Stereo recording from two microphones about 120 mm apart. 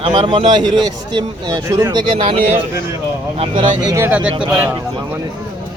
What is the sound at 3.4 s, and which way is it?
Speech, 45° right (ahead or behind).